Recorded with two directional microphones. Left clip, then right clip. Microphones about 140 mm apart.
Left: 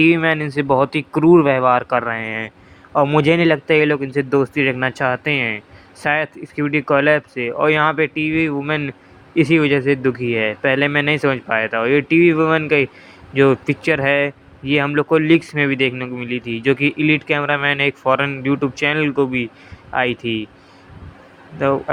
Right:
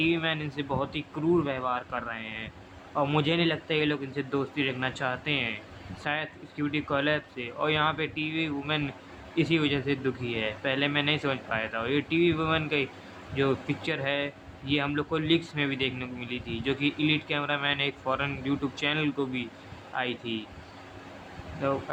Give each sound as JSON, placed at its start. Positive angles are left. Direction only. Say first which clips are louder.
{"t": 0.0, "sound": "speech", "louder": "left 13 dB", "side_deg": 50}
{"t": 2.9, "sound": "speech", "louder": "left 12 dB", "side_deg": 35}
{"t": 3.2, "sound": "speech", "louder": "left 13 dB", "side_deg": 50}